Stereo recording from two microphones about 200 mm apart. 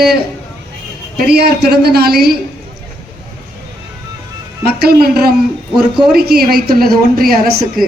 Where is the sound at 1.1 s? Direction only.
50° right (ahead or behind).